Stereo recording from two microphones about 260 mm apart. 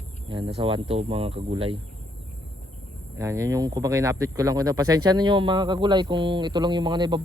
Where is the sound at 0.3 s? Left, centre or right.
Centre.